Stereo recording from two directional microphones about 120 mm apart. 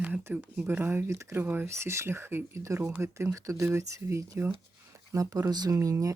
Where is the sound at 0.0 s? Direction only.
15° right (ahead or behind).